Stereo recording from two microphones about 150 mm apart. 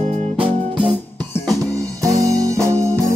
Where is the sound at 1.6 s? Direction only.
25° right (ahead or behind).